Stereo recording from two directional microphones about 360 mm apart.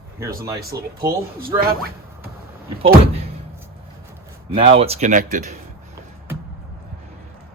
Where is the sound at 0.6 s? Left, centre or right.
Right.